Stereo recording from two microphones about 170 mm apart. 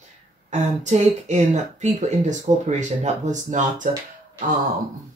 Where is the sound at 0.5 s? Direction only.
45° right (ahead or behind).